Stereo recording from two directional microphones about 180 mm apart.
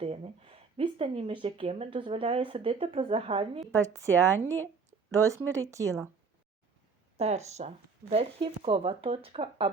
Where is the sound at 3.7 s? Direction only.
15° right (ahead or behind).